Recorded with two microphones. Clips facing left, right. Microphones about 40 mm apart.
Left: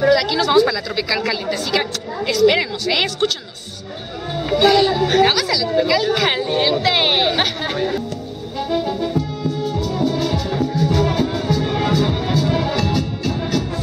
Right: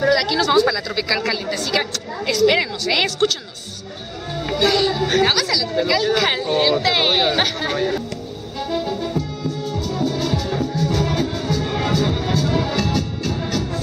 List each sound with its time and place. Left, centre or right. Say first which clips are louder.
0.0 s a woman's voice: left 2 dB; centre
4.4 s speech: left 4 dB; centre
8.5 s music: left 3 dB; centre